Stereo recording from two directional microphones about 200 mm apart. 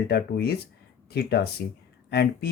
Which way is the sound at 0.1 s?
50° left (ahead or behind).